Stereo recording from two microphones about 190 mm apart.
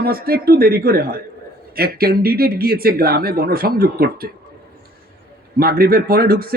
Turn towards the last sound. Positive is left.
turn(degrees=-50)  # may be behind; listen again after turning